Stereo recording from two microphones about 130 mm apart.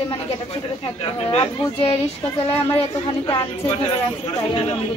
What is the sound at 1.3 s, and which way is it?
Speech, 50° left (ahead or behind).